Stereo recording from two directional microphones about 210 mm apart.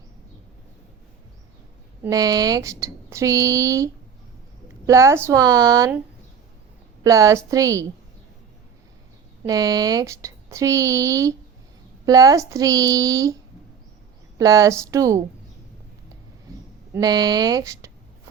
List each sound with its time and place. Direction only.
2.0 s speech: 15° right (ahead or behind)
4.9 s speech: 15° right (ahead or behind)
7.0 s speech: 15° right (ahead or behind)
9.4 s speech: 15° right (ahead or behind)
14.3 s speech: 15° right (ahead or behind)
16.9 s speech: 20° right (ahead or behind)